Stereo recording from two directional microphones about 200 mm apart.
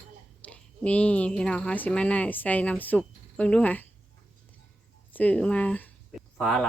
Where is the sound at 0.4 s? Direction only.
5° left (ahead or behind).